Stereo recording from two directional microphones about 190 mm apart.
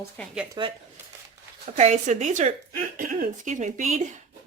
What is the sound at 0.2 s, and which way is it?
Speech, 5° left (ahead or behind).